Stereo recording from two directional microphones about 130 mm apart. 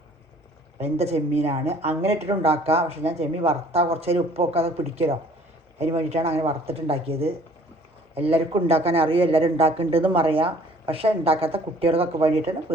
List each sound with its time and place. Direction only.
0.8 s a man's voice: 55° right (ahead or behind)